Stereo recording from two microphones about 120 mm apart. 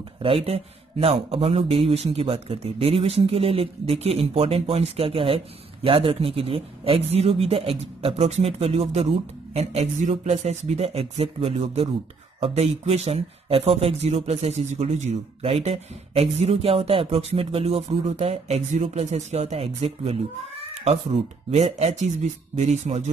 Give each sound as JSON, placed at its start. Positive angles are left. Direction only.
{"t": 0.2, "sound": "speech", "side_deg": -55}
{"t": 10.3, "sound": "speech", "side_deg": -65}
{"t": 20.8, "sound": "speech", "side_deg": -70}